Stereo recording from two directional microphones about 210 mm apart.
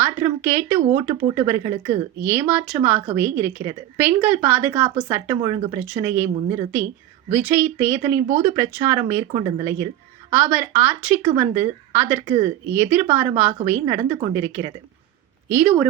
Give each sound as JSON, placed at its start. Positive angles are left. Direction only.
{"t": 0.0, "sound": "a woman's voice", "side_deg": -10}
{"t": 7.3, "sound": "speech", "side_deg": -10}
{"t": 9.2, "sound": "speech", "side_deg": -25}